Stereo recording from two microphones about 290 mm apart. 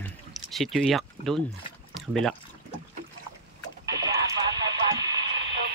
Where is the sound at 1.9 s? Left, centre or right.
Centre.